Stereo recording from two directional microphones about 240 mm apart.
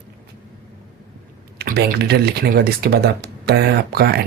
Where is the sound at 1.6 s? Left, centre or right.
Right.